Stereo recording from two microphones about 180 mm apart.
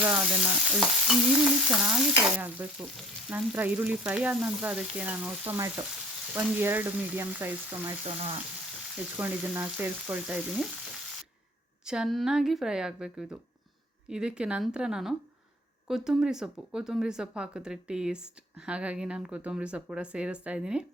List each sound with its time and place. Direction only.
0.0 s frying: 10° right (ahead or behind)
1.6 s speech: 5° right (ahead or behind)
2.4 s frying: 5° right (ahead or behind)
8.0 s frying: 35° right (ahead or behind)
9.1 s frying: 10° right (ahead or behind)
11.9 s speech: centre (ahead or behind)